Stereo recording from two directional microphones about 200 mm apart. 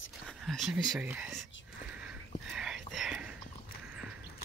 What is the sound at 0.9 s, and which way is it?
Speech, 5° right (ahead or behind).